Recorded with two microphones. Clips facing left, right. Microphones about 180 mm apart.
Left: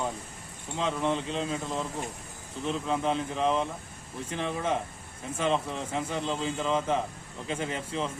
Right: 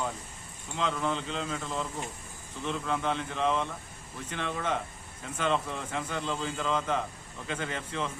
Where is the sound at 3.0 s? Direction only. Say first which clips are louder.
Left 3 dB; 30° left (ahead or behind).